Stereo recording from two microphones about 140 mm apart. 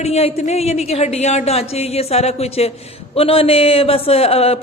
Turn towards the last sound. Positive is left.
turn(degrees=45)  # may be behind; listen again after turning